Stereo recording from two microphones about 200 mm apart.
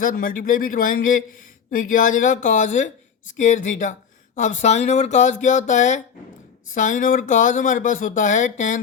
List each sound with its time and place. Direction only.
0.0 s speech: 45° left (ahead or behind)